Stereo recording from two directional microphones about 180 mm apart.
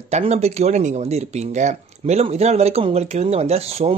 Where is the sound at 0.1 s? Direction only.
35° right (ahead or behind).